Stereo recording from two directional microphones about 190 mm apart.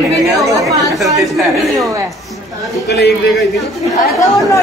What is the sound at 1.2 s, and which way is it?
Speech, centre (ahead or behind).